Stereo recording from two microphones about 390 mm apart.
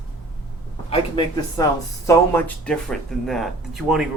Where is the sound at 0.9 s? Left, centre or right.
Centre.